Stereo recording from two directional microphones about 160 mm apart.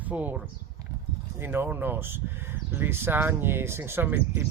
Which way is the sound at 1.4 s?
15° right (ahead or behind).